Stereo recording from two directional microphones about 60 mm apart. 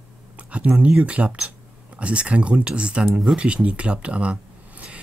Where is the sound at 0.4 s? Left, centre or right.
Right.